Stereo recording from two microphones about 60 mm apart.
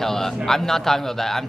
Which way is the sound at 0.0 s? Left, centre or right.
Centre.